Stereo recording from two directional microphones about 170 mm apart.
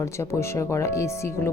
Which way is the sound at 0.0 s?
15° left (ahead or behind).